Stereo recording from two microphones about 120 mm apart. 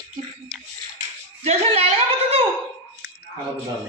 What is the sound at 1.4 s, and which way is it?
Speech, 60° right (ahead or behind).